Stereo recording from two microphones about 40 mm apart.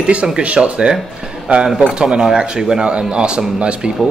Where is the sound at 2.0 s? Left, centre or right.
Right.